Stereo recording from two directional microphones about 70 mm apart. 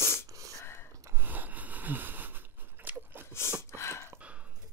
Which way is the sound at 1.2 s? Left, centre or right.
Right.